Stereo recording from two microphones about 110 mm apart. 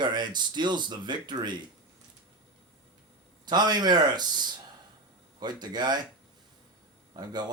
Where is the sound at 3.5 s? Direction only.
40° right (ahead or behind).